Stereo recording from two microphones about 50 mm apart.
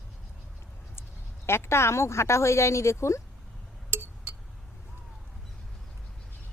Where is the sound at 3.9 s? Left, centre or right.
Right.